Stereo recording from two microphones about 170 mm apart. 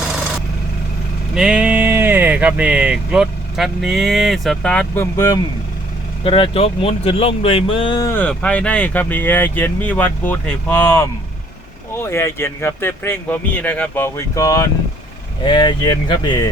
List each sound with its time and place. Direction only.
1.4 s speech: 5° right (ahead or behind)
5.1 s speech: 20° left (ahead or behind)
6.2 s speech: 30° left (ahead or behind)
8.1 s speech: 10° left (ahead or behind); by 16.5 s 25° left (ahead or behind)